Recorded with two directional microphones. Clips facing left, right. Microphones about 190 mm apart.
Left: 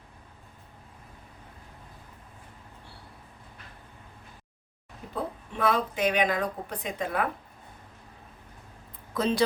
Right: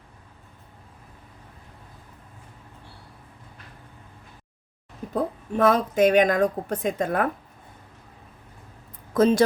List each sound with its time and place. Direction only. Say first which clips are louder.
5.1 s speech: right 8 dB; 45° right (ahead or behind)
9.1 s speech: right 8 dB; 45° right (ahead or behind)